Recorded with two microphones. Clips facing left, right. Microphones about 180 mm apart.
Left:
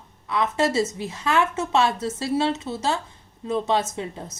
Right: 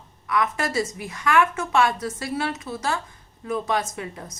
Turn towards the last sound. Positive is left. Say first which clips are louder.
# left 2 dB
turn(degrees=25)  # may be behind; listen again after turning